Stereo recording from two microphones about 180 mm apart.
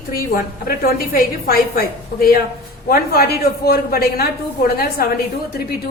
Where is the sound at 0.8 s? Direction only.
55° left (ahead or behind).